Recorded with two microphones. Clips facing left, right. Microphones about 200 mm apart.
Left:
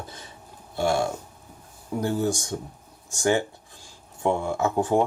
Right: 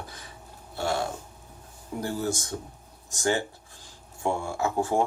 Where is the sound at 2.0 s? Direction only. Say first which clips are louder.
Left 5 dB; 15° left (ahead or behind).